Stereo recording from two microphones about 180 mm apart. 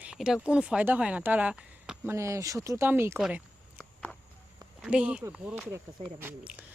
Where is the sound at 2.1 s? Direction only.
15° right (ahead or behind).